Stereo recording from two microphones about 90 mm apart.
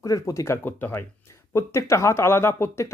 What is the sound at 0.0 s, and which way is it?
Speech, 40° left (ahead or behind).